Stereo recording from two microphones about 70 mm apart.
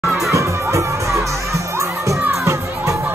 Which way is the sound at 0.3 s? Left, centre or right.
Right.